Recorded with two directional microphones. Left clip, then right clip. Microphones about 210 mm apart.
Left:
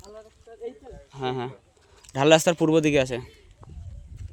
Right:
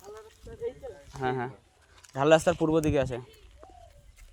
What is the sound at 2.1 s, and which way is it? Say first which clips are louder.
A man's voice: left 4 dB; 60° left (ahead or behind).